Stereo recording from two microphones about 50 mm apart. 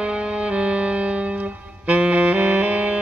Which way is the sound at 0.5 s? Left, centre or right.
Right.